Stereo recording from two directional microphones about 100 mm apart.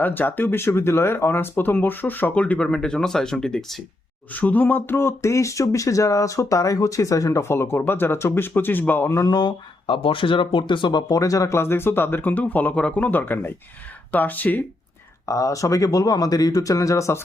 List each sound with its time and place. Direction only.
0.0 s speech: 20° left (ahead or behind); by 3.8 s 5° left (ahead or behind)
4.3 s speech: 15° left (ahead or behind)
9.0 s speech: 35° left (ahead or behind); by 11.0 s 55° left (ahead or behind)
11.1 s speech: 35° left (ahead or behind); by 14.6 s 15° left (ahead or behind)
15.3 s speech: 30° left (ahead or behind)